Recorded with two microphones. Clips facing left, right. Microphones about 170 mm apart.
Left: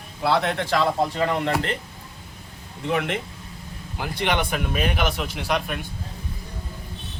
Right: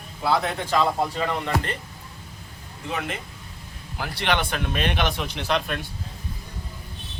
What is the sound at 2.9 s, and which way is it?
Speech, 70° left (ahead or behind).